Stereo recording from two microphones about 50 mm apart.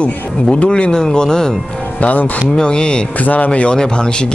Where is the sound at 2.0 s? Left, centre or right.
Left.